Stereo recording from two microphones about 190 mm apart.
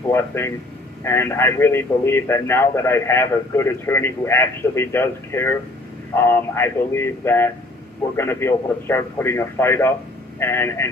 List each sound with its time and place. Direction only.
0.1 s a man's voice: 15° left (ahead or behind)